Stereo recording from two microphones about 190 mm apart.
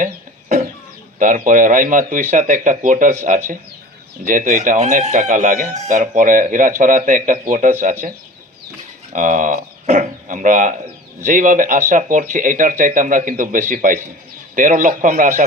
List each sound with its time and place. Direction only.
0.0 s chicken: 45° right (ahead or behind)
1.2 s speech: 45° right (ahead or behind)
9.1 s speech: 40° right (ahead or behind)